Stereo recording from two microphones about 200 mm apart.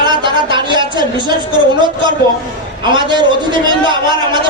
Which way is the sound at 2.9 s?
20° right (ahead or behind).